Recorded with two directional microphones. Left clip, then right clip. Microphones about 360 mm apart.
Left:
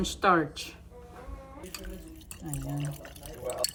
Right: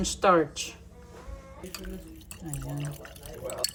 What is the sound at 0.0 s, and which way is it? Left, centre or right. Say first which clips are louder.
Speech: right 2 dB; centre.